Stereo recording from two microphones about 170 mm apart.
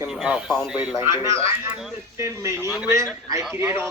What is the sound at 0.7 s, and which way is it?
Speech, 10° right (ahead or behind).